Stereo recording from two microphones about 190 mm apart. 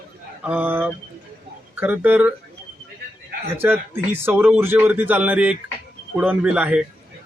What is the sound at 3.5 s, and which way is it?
A man's voice, 10° right (ahead or behind).